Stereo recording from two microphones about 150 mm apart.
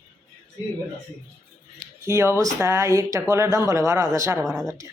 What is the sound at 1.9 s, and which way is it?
A woman's voice, 20° right (ahead or behind).